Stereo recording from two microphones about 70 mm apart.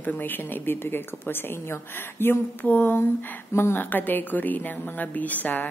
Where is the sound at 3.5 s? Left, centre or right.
Left.